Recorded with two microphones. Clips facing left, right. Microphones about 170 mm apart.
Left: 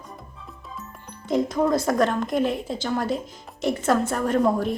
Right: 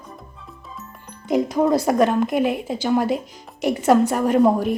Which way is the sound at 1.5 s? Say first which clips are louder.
Right 5 dB; 25° right (ahead or behind).